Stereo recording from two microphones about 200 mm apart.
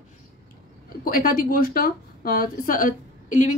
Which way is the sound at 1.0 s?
45° left (ahead or behind).